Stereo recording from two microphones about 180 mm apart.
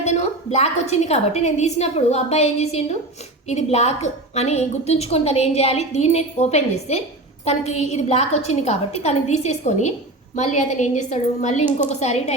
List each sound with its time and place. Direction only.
0.0 s a woman's voice: 40° left (ahead or behind)